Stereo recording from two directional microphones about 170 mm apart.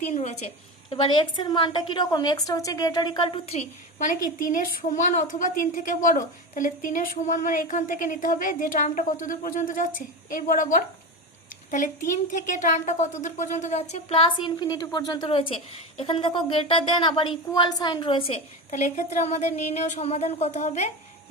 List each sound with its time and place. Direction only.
0.0 s a woman's voice: 45° left (ahead or behind); by 3.4 s 25° left (ahead or behind)
3.5 s a woman's voice: 40° left (ahead or behind)
12.3 s a woman's voice: 45° left (ahead or behind)